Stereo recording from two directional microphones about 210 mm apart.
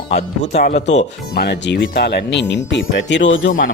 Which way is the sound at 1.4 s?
50° left (ahead or behind).